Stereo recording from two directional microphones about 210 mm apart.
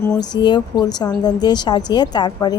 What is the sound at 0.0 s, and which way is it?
A woman's voice, 20° left (ahead or behind).